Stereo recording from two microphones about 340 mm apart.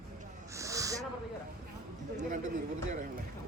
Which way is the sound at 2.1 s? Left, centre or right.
Right.